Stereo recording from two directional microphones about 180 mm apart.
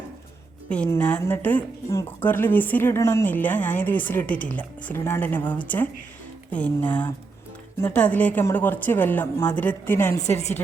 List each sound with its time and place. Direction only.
0.7 s a woman's voice: 5° left (ahead or behind)
10.2 s a woman's voice: 40° left (ahead or behind)